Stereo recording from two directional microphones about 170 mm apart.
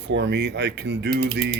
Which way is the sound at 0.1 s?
90° right.